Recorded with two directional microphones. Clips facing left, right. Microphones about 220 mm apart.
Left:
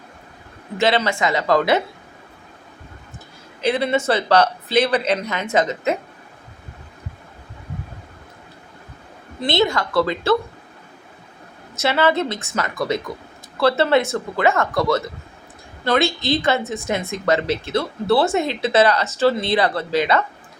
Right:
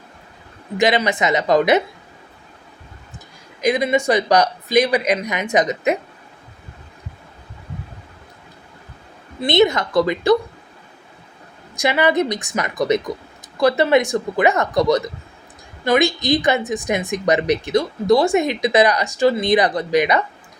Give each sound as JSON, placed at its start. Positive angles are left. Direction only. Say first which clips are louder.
{"t": 0.8, "sound": "a woman's voice", "louder": "right 1 dB", "side_deg": -15}
{"t": 3.6, "sound": "speech", "louder": "right 2 dB", "side_deg": -15}
{"t": 9.4, "sound": "speech", "louder": "right 4 dB", "side_deg": -20}
{"t": 11.8, "sound": "speech", "louder": "right 1 dB", "side_deg": -15}